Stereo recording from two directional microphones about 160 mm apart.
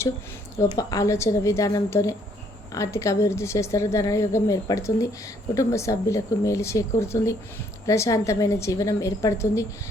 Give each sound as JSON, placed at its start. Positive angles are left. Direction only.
{"t": 0.7, "sound": "a woman's voice", "side_deg": 25}